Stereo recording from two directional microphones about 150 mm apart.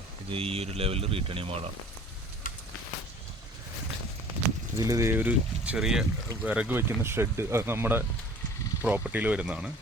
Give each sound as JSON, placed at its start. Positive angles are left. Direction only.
{"t": 0.3, "sound": "speech", "side_deg": -40}
{"t": 4.8, "sound": "speech", "side_deg": -20}